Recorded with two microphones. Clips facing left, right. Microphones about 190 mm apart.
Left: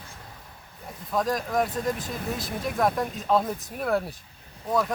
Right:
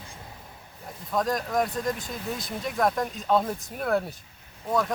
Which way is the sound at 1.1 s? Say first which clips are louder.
Even; centre (ahead or behind).